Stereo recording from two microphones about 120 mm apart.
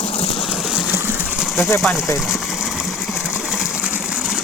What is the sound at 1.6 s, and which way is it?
Pigeon, 20° left (ahead or behind).